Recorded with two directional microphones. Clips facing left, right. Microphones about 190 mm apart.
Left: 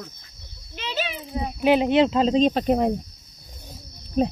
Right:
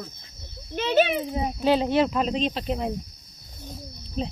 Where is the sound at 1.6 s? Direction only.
15° left (ahead or behind).